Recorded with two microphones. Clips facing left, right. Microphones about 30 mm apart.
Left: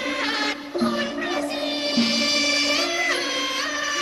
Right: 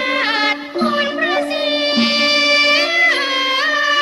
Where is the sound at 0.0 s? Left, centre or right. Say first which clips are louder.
Right 8 dB; right.